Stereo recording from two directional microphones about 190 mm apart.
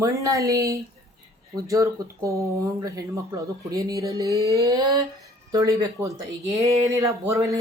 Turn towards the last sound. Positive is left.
turn(degrees=-15)  # may be behind; listen again after turning